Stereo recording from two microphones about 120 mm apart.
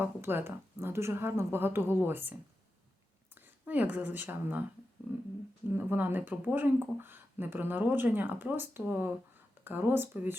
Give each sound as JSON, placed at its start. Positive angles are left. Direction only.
{"t": 0.0, "sound": "speech", "side_deg": -20}
{"t": 3.3, "sound": "speech", "side_deg": -15}
{"t": 5.7, "sound": "speech", "side_deg": -15}